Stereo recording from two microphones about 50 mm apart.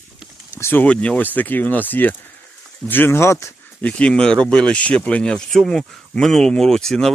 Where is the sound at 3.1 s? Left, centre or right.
Left.